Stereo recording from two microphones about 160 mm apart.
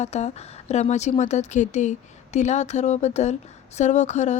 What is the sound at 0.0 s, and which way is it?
Speech, 45° left (ahead or behind).